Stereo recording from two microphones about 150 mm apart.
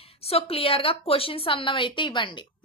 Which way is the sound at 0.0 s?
40° left (ahead or behind).